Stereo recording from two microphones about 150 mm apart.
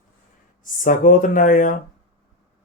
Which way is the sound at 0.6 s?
65° left (ahead or behind).